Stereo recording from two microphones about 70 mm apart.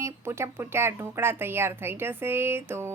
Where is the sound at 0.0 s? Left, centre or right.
Right.